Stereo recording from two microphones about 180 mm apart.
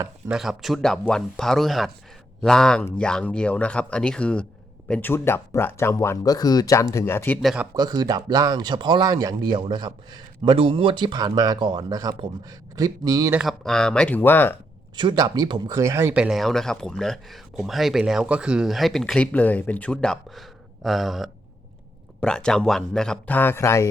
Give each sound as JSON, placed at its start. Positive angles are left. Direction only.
{"t": 0.3, "sound": "speech", "side_deg": 0}
{"t": 7.4, "sound": "speech", "side_deg": -5}
{"t": 7.7, "sound": "speech", "side_deg": -20}
{"t": 13.4, "sound": "speech", "side_deg": 0}
{"t": 14.9, "sound": "speech", "side_deg": -25}